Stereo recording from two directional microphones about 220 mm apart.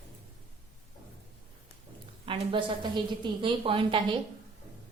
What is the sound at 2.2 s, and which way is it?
A woman's voice, 25° right (ahead or behind).